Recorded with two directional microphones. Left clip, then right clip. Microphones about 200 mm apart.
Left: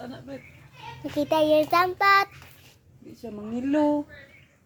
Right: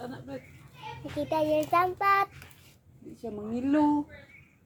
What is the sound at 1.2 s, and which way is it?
Child singing, 45° left (ahead or behind).